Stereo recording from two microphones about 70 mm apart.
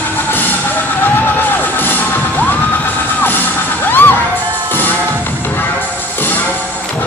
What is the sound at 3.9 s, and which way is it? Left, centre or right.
Music, left.